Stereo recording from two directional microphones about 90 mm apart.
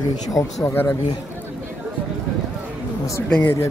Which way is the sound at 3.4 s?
30° left (ahead or behind).